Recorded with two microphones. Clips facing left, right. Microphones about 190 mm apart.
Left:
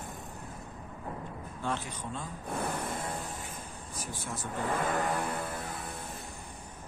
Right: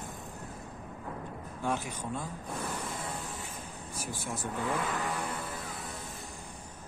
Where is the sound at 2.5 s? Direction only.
55° left (ahead or behind).